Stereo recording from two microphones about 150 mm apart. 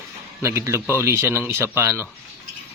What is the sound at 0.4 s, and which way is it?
Speech, 15° right (ahead or behind).